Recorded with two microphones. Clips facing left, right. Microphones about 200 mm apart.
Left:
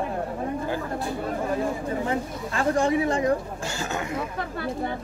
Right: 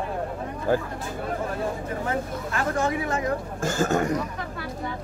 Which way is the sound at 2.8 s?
30° left (ahead or behind).